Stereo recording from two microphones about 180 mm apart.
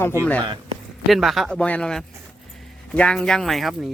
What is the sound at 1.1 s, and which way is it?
Speech, centre (ahead or behind).